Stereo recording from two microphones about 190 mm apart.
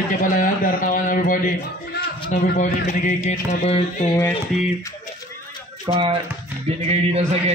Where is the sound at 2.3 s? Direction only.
40° left (ahead or behind).